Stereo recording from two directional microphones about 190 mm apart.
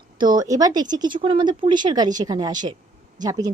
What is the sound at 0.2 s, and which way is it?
Speech, 20° right (ahead or behind).